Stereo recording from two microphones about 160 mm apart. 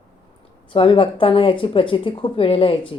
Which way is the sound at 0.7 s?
35° left (ahead or behind).